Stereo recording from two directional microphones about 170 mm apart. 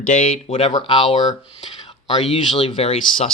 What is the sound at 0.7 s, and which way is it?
Speech, 25° left (ahead or behind).